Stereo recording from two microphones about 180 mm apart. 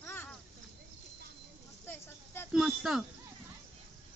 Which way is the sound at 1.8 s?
15° left (ahead or behind).